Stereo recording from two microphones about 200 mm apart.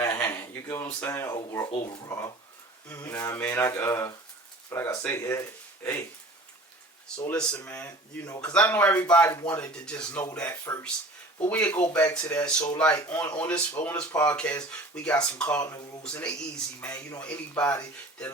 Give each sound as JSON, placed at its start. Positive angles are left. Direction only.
{"t": 0.0, "sound": "speech", "side_deg": 15}
{"t": 2.9, "sound": "speech", "side_deg": 10}
{"t": 7.2, "sound": "speech", "side_deg": 5}
{"t": 14.2, "sound": "speech", "side_deg": 5}